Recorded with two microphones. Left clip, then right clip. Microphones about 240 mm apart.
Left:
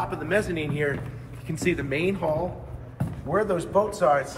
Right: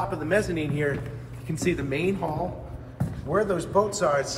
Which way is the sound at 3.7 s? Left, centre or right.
Left.